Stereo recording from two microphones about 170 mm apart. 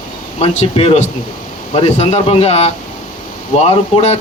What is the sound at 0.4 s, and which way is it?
Speech, 40° left (ahead or behind).